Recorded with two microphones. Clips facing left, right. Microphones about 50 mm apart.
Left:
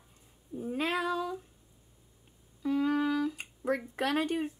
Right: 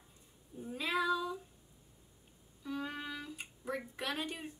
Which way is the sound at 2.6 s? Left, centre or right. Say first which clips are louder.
Left 12 dB; left.